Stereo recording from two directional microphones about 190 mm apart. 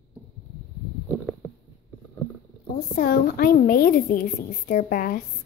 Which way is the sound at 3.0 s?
50° left (ahead or behind).